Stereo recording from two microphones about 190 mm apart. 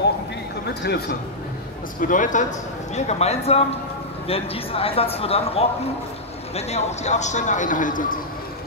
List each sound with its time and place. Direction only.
2.0 s a man's voice: 45° left (ahead or behind)